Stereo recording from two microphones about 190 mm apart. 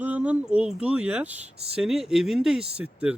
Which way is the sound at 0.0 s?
10° right (ahead or behind).